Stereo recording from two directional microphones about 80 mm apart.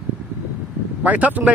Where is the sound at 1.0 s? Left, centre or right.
Centre.